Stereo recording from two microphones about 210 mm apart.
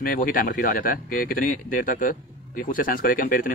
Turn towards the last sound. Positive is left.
turn(degrees=45)  # may be behind; listen again after turning